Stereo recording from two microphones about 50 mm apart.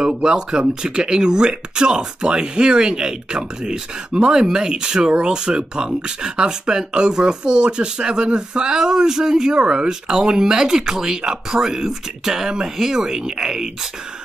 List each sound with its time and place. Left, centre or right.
0.0 s speech: centre